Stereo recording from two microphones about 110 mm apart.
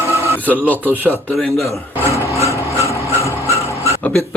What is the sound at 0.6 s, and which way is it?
Speech, 15° left (ahead or behind).